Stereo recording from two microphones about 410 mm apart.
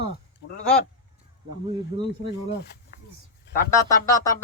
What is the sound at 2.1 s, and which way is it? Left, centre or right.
Speech, left.